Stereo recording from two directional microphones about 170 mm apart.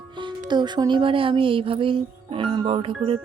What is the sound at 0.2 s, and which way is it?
Music, 25° right (ahead or behind).